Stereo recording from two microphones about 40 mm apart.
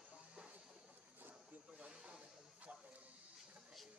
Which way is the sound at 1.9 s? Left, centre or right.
Right.